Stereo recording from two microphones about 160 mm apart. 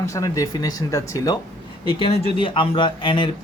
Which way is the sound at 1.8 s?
35° left (ahead or behind).